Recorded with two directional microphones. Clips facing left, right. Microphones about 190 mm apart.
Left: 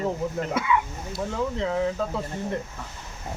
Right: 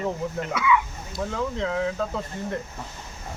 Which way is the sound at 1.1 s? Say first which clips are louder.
Even; 5° left (ahead or behind).